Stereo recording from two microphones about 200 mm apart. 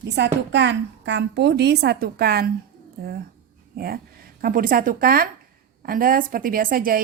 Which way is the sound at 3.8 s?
50° right (ahead or behind).